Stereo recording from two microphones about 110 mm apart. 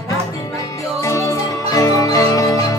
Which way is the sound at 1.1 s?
30° left (ahead or behind).